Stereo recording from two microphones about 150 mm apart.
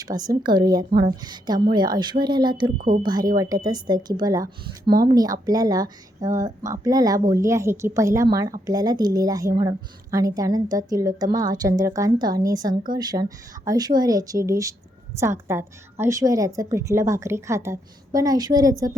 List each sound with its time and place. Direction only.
0.0 s speech: 25° right (ahead or behind)
2.7 s speech: 70° right (ahead or behind)
3.0 s speech: 25° right (ahead or behind)